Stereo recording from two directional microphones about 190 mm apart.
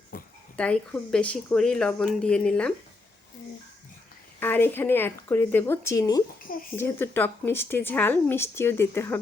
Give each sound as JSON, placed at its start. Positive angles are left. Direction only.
{"t": 0.1, "sound": "dog", "side_deg": 50}
{"t": 0.5, "sound": "speech", "side_deg": 5}
{"t": 4.4, "sound": "speech", "side_deg": 10}
{"t": 6.4, "sound": "speech", "side_deg": 45}
{"t": 6.7, "sound": "speech", "side_deg": 10}